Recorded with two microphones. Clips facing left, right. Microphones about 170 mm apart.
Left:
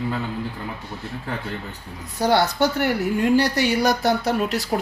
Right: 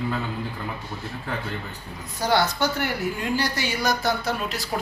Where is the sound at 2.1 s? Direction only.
60° left (ahead or behind).